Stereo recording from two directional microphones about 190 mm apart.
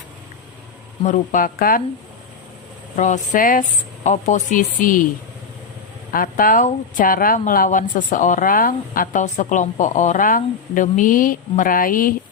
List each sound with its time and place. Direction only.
1.0 s a woman's voice: 40° left (ahead or behind)
2.9 s a woman's voice: 40° left (ahead or behind)
6.1 s a woman's voice: 45° left (ahead or behind)